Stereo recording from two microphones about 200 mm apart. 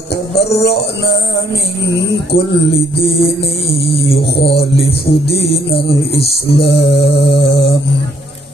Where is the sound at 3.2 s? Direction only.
55° left (ahead or behind).